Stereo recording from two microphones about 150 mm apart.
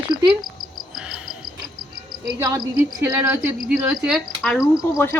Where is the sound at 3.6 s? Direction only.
5° right (ahead or behind).